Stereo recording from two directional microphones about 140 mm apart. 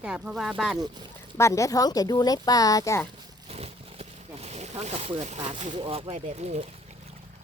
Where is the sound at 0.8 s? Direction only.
30° right (ahead or behind).